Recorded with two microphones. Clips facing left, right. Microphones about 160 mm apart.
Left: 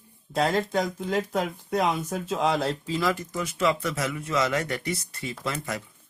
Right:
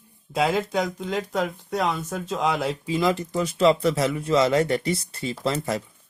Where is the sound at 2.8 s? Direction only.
20° right (ahead or behind).